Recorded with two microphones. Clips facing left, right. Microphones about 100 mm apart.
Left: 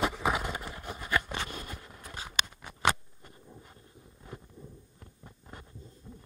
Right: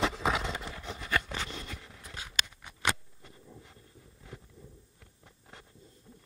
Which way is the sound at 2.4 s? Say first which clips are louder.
Left 4 dB; 50° left (ahead or behind).